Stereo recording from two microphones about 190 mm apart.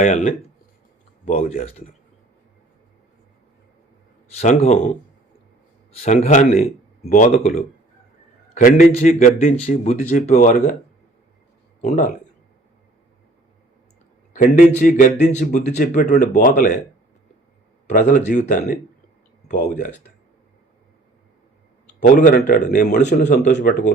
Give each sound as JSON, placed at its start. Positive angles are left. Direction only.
{"t": 0.0, "sound": "a man's voice", "side_deg": 40}
{"t": 4.4, "sound": "a man's voice", "side_deg": 35}
{"t": 5.9, "sound": "a man's voice", "side_deg": 30}
{"t": 6.2, "sound": "a man's voice", "side_deg": 45}
{"t": 11.8, "sound": "a man's voice", "side_deg": 40}
{"t": 14.3, "sound": "a man's voice", "side_deg": 45}
{"t": 17.8, "sound": "a man's voice", "side_deg": 40}
{"t": 22.0, "sound": "speech", "side_deg": 45}